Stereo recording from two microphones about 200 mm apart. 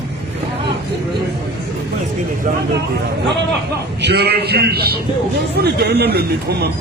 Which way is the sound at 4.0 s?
55° right (ahead or behind).